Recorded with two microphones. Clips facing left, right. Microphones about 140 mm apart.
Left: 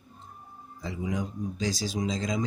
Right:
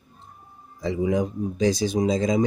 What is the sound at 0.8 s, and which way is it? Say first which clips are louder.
Speech: right 9 dB; 80° right.